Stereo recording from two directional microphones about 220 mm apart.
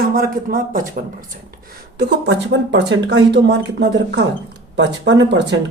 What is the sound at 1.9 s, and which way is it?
Speech, 50° right (ahead or behind).